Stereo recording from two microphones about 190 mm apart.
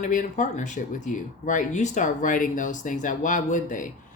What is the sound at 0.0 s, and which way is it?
Speech, 45° left (ahead or behind).